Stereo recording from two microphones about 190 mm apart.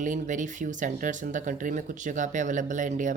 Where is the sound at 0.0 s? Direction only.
40° right (ahead or behind).